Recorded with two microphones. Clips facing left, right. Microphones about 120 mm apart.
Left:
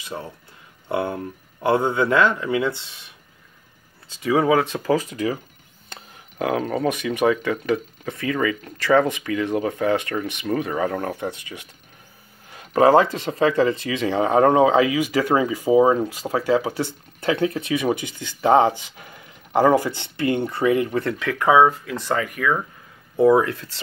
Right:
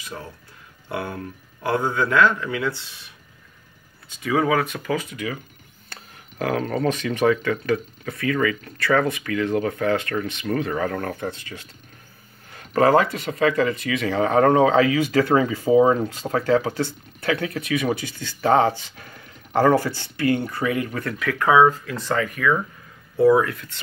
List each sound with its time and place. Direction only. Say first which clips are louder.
0.0 s speech: left 3 dB; 20° left (ahead or behind)
4.1 s speech: left 3 dB; 25° left (ahead or behind)
5.9 s speech: left 2 dB; 20° left (ahead or behind)
17.2 s speech: left 3 dB; 25° left (ahead or behind)